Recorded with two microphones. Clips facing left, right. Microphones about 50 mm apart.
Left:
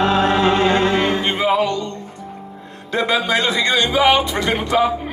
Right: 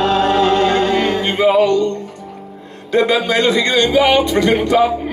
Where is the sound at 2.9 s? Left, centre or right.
Centre.